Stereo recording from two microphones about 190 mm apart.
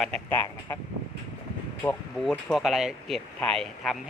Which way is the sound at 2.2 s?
Centre (ahead or behind).